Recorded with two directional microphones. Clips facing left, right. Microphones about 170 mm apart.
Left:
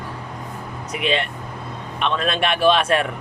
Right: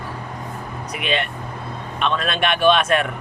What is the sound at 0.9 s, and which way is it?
Speech, 30° left (ahead or behind).